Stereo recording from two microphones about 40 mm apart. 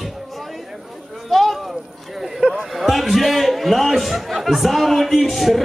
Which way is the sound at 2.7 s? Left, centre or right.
Centre.